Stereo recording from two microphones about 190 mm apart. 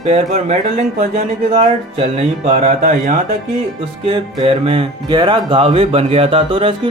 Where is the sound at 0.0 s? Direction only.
35° right (ahead or behind).